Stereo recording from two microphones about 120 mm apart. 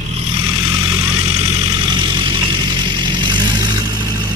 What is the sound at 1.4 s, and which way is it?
Vehicle, 30° right (ahead or behind).